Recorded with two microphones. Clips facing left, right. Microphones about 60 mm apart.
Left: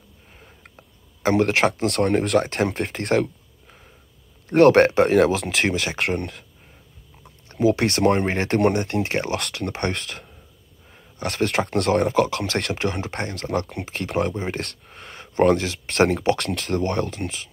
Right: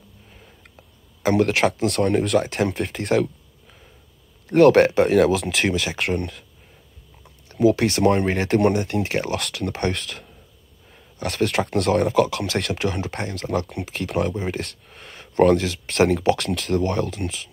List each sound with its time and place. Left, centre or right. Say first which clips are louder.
0.7 s a sound: left 1 dB; left
1.4 s speech: right 1 dB; left
4.6 s speech: even; left
7.4 s a sound: right 2 dB; left
7.8 s speech: right 1 dB; left
8.2 s speech: right 1 dB; left
8.5 s speech: even; left
9.8 s speech: right 2 dB; left
12.4 s speech: even; left
13.9 s speech: even; left
14.5 s a sound: even; left
15.4 s speech: right 1 dB; left
15.9 s speech: right 1 dB; left
17.1 s speech: right 1 dB; left